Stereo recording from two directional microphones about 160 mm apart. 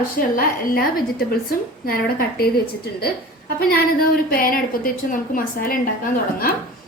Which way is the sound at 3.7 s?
65° left (ahead or behind).